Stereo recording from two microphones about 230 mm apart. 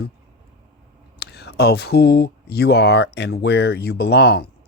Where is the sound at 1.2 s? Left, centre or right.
Left.